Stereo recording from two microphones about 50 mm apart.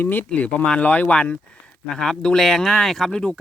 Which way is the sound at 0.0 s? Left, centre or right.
Left.